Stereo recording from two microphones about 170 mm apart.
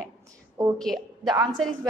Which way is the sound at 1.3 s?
25° right (ahead or behind).